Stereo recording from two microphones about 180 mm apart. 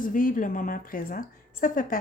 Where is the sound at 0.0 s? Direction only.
45° left (ahead or behind).